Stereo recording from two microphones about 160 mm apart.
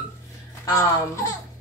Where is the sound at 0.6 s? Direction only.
20° left (ahead or behind).